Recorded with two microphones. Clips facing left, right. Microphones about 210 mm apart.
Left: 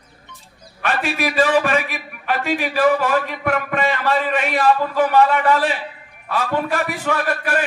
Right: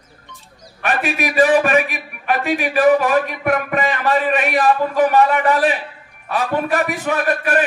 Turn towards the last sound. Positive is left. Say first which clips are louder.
# right 3 dB
turn(degrees=-20)  # may be behind; listen again after turning